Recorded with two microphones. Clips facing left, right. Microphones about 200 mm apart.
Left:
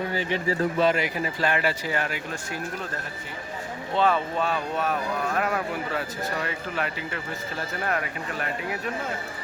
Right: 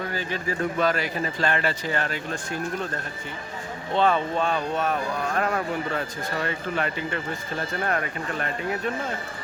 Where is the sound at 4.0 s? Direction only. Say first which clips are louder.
Right 1 dB; 5° left (ahead or behind).